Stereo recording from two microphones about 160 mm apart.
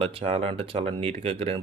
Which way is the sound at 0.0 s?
35° right (ahead or behind).